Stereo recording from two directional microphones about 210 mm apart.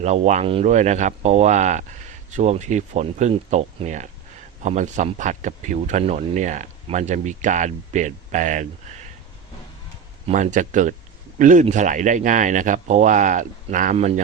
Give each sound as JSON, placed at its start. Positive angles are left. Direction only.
{"t": 0.0, "sound": "speech", "side_deg": -30}
{"t": 10.2, "sound": "speech", "side_deg": -35}